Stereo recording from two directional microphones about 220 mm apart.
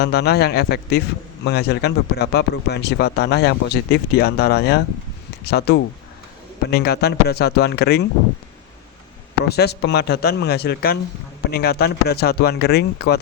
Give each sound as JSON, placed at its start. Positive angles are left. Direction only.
{"t": 0.0, "sound": "speech", "side_deg": 45}
{"t": 9.4, "sound": "speech", "side_deg": 50}